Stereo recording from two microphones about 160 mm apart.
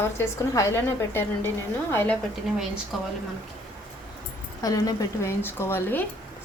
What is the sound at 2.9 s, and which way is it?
Speech, centre (ahead or behind).